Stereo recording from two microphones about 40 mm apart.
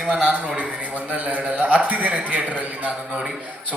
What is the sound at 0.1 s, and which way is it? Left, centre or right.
A man's voice, right.